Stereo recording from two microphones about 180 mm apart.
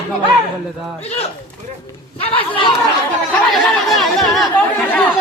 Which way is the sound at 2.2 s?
30° left (ahead or behind).